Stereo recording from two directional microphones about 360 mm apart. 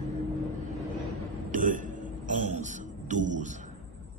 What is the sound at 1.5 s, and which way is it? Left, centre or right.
Music, right.